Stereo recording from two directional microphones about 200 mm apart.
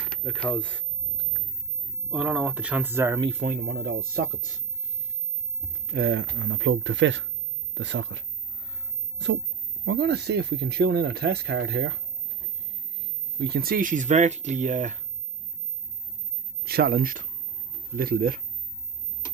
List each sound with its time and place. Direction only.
0.2 s speech: 5° left (ahead or behind)
2.0 s speech: 5° right (ahead or behind)
3.2 s speech: 30° right (ahead or behind)
3.6 s speech: 50° right (ahead or behind)
5.9 s speech: 55° right (ahead or behind)
9.8 s speech: 55° right (ahead or behind)
13.4 s speech: 50° right (ahead or behind)
16.6 s speech: 50° right (ahead or behind)